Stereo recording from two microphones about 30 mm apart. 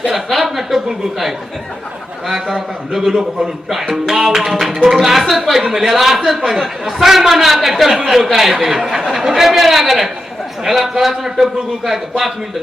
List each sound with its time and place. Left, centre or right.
0.1 s a woman's voice: centre
2.9 s a man's voice: centre
4.2 s music: right
4.9 s a man's voice: centre